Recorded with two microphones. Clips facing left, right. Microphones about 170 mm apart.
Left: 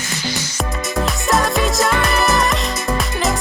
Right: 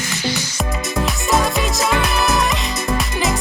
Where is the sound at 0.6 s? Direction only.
Centre (ahead or behind).